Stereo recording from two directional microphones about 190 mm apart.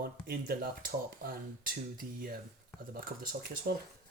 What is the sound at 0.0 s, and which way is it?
Speech, 55° right (ahead or behind).